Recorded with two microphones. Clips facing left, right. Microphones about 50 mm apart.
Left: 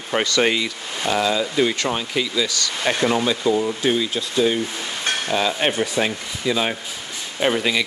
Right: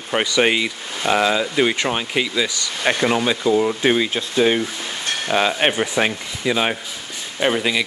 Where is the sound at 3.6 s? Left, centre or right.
Right.